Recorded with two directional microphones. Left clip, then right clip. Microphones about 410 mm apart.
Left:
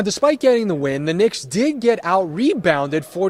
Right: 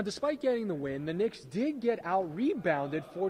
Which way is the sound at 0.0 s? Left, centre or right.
Left.